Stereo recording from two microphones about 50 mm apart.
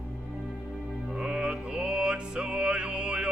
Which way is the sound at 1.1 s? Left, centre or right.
Centre.